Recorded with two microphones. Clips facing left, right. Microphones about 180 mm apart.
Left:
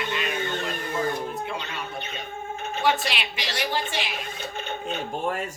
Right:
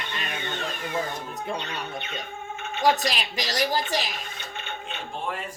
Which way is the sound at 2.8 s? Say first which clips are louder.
Right 2 dB; 40° right (ahead or behind).